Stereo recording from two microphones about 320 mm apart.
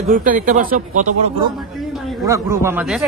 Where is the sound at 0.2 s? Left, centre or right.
Right.